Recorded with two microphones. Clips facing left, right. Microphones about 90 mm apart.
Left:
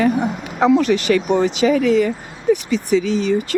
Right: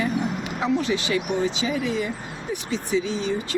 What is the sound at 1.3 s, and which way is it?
Speech, 70° left (ahead or behind).